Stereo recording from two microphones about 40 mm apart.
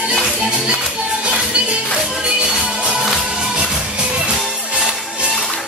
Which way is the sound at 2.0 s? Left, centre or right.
Centre.